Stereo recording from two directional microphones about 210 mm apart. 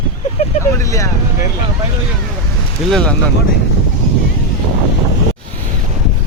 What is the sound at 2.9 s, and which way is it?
Speech, 5° left (ahead or behind).